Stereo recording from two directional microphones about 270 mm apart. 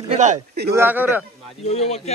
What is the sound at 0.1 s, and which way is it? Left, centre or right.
Speech, right.